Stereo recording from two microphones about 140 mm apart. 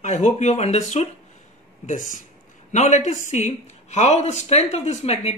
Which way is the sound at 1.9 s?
65° left (ahead or behind).